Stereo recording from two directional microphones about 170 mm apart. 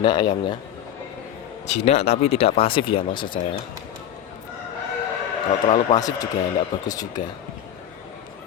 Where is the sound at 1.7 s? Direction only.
40° left (ahead or behind).